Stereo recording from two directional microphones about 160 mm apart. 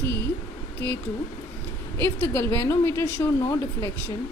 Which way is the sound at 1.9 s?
15° left (ahead or behind).